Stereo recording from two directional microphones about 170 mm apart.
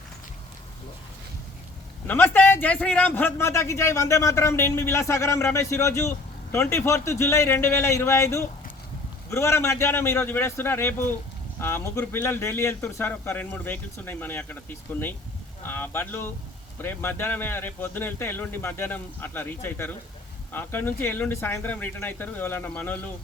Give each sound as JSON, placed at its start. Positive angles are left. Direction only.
{"t": 2.0, "sound": "a man's voice", "side_deg": 10}